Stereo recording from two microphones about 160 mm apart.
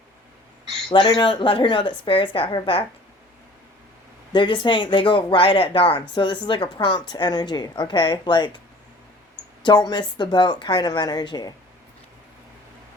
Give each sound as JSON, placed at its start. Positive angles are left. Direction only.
{"t": 0.9, "sound": "a woman's voice", "side_deg": 35}
{"t": 4.3, "sound": "a woman's voice", "side_deg": 30}
{"t": 9.6, "sound": "a woman's voice", "side_deg": 25}